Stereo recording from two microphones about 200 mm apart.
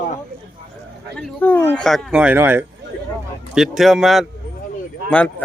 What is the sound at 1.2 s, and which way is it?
Speech, 10° left (ahead or behind).